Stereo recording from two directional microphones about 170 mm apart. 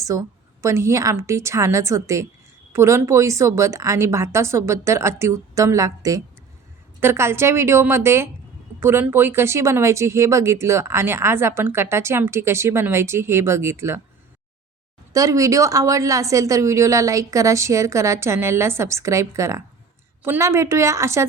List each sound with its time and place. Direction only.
0.0 s a woman's voice: 20° right (ahead or behind)
15.1 s a woman's voice: 20° right (ahead or behind)